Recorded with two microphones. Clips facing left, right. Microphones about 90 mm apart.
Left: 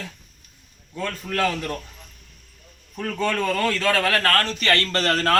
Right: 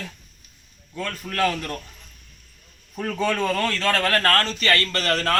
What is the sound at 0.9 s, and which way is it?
Speech, 20° left (ahead or behind).